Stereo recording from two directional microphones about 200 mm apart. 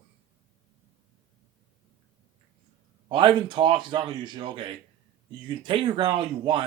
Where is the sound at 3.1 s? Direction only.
25° right (ahead or behind).